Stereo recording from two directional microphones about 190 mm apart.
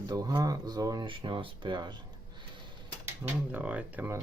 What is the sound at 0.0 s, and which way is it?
Speech, 20° right (ahead or behind).